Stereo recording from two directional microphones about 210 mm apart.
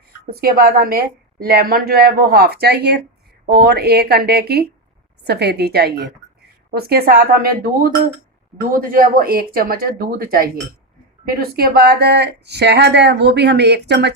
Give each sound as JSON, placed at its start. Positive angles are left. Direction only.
{"t": 0.3, "sound": "speech", "side_deg": -45}